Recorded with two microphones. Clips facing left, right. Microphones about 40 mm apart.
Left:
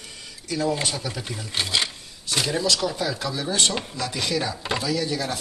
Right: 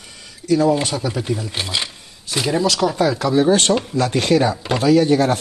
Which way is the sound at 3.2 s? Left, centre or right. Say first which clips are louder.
Right 11 dB; right.